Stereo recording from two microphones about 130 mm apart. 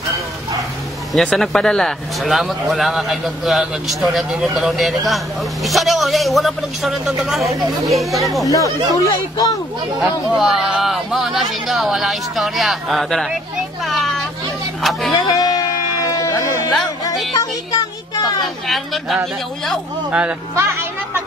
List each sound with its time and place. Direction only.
1.1 s speech: centre (ahead or behind)
8.5 s speech: 25° left (ahead or behind)
9.9 s speech: 5° right (ahead or behind)
15.3 s a sound: 30° left (ahead or behind)
18.7 s speech: centre (ahead or behind)
20.1 s speech: 10° right (ahead or behind)
20.5 s speech: 20° right (ahead or behind)